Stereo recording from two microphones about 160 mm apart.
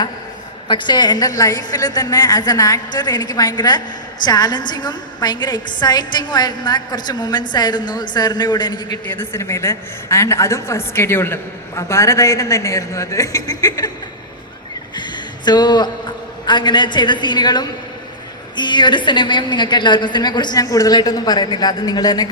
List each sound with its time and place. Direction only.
0.7 s a woman's voice: 30° left (ahead or behind)
9.0 s a woman's voice: 15° left (ahead or behind)
14.9 s a sound: 30° left (ahead or behind)
16.5 s a woman's voice: 30° left (ahead or behind)